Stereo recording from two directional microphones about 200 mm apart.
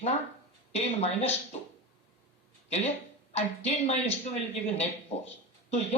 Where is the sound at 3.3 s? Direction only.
35° left (ahead or behind).